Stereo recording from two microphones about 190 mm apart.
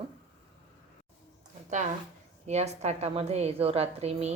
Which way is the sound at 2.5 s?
35° right (ahead or behind).